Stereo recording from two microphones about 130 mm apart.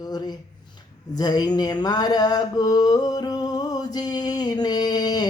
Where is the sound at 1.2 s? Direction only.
30° left (ahead or behind).